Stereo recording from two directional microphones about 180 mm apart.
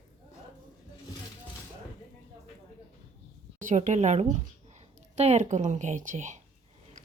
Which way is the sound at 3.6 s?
45° right (ahead or behind).